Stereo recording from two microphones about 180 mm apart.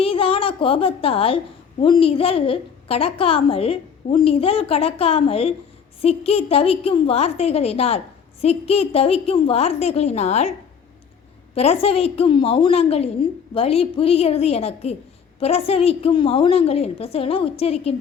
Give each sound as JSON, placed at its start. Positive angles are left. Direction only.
{"t": 0.0, "sound": "a woman's voice", "side_deg": 30}
{"t": 11.5, "sound": "a woman's voice", "side_deg": 35}